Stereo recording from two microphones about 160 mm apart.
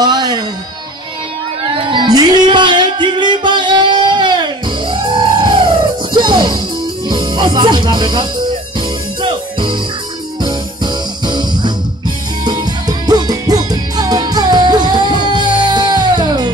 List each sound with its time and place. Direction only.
0.0 s music: 25° right (ahead or behind)
1.8 s music: 30° right (ahead or behind)